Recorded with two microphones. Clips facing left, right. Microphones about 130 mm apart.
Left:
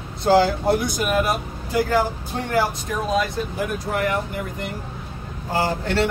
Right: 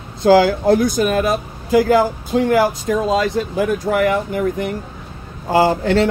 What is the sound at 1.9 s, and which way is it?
Speech, 90° right.